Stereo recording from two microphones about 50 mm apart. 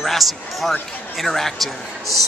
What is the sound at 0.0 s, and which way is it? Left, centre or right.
A man's voice, centre.